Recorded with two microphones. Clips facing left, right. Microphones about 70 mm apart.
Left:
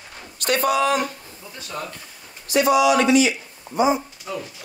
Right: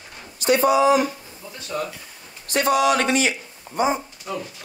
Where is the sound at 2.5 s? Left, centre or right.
Right.